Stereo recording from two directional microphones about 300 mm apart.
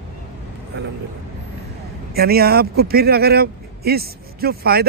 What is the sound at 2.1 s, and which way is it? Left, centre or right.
Speech, right.